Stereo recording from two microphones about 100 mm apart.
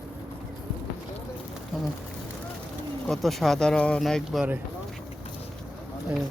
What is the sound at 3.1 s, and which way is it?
Speech, centre (ahead or behind).